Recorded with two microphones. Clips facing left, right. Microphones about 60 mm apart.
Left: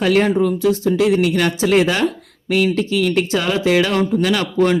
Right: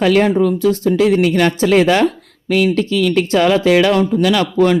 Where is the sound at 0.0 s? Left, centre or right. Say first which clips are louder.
Right 3 dB; right.